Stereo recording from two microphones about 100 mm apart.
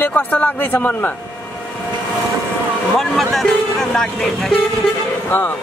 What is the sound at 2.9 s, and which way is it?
Speech, centre (ahead or behind).